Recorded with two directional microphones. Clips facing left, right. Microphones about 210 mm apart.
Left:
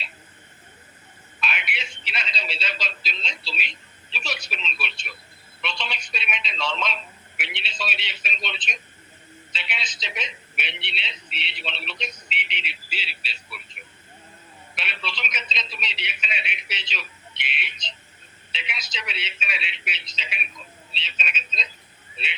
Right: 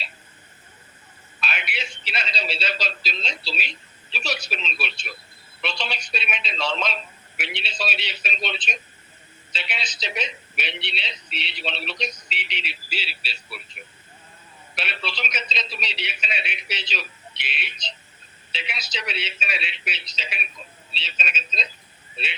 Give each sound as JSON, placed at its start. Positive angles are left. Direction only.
{"t": 1.4, "sound": "a man's voice", "side_deg": -40}